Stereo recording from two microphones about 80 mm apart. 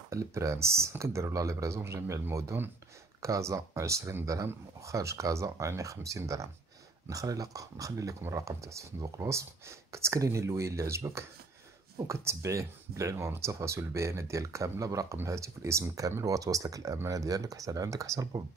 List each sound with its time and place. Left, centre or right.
0.1 s speech: right